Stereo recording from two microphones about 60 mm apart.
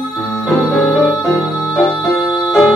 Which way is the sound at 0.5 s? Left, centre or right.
Centre.